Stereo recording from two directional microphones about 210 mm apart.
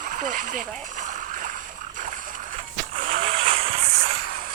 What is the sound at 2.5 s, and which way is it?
Vehicle, 35° right (ahead or behind).